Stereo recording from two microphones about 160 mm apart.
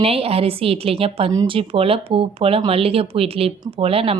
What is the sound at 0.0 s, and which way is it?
Speech, 35° right (ahead or behind).